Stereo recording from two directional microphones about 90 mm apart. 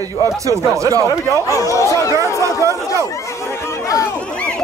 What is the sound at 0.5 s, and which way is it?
Speech, 40° right (ahead or behind).